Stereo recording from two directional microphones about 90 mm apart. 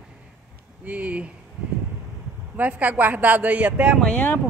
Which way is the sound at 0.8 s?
15° right (ahead or behind).